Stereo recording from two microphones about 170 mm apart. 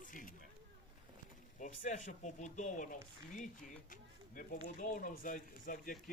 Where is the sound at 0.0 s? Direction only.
50° left (ahead or behind).